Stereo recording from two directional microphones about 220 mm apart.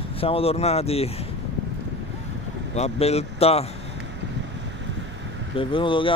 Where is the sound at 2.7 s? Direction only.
30° left (ahead or behind).